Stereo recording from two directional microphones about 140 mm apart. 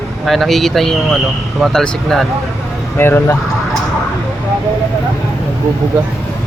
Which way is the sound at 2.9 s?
15° left (ahead or behind).